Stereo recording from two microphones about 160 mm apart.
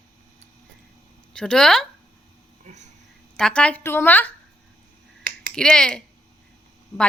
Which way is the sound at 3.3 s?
5° left (ahead or behind).